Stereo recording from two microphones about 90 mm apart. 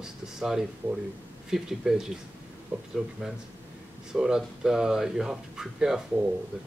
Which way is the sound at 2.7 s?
15° right (ahead or behind).